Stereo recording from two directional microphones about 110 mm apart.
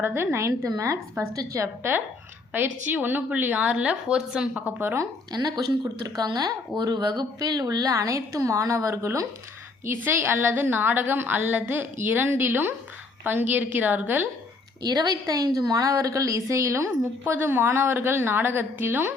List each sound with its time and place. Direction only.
0.0 s a woman's voice: 20° right (ahead or behind)
4.8 s a woman's voice: 20° right (ahead or behind)
5.3 s a woman's voice: 35° right (ahead or behind); by 14.3 s 15° right (ahead or behind)
14.8 s a woman's voice: 40° right (ahead or behind); by 19.1 s 20° right (ahead or behind)